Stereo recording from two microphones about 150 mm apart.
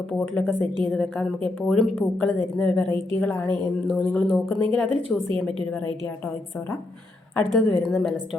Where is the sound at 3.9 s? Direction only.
Centre (ahead or behind).